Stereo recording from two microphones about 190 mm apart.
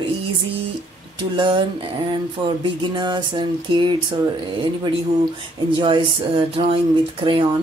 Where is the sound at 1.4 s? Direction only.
25° right (ahead or behind).